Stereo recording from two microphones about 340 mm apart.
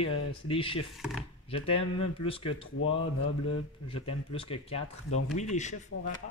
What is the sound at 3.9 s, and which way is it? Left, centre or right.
Speech, centre.